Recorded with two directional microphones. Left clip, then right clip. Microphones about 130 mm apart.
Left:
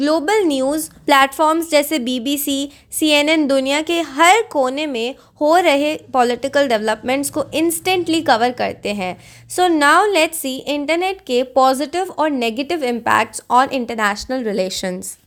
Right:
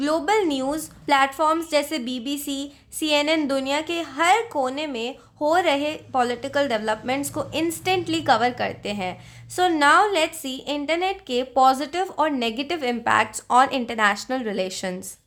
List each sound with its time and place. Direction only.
0.0 s a woman's voice: 40° left (ahead or behind)
1.0 s a woman's voice: 55° left (ahead or behind); by 13.6 s 40° left (ahead or behind)
13.6 s speech: 30° left (ahead or behind)